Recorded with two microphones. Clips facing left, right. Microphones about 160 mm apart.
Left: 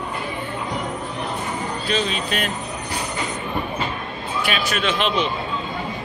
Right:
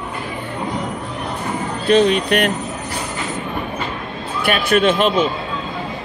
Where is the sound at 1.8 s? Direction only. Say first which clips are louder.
Right 12 dB; 60° right (ahead or behind).